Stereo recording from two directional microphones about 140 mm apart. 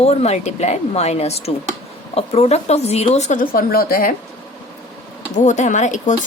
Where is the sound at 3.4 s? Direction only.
90° left.